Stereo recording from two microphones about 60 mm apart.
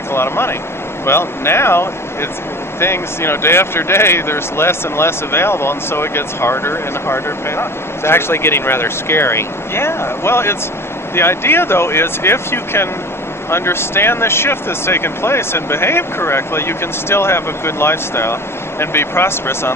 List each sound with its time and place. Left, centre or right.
0.1 s speech: left